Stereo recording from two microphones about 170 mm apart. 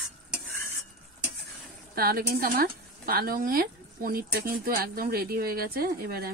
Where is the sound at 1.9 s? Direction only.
60° right (ahead or behind).